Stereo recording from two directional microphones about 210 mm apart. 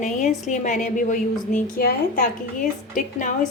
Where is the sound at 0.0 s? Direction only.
35° left (ahead or behind).